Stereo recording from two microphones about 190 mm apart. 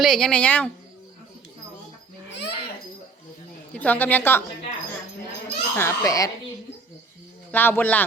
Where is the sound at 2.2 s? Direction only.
65° left (ahead or behind).